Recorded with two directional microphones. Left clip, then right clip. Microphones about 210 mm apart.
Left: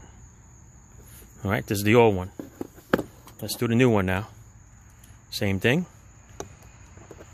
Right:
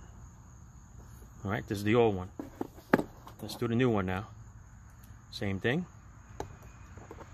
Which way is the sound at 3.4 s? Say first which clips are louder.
Left 8 dB; 55° left (ahead or behind).